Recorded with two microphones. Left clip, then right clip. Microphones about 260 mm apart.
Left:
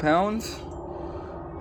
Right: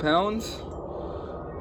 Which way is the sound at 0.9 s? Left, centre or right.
Left.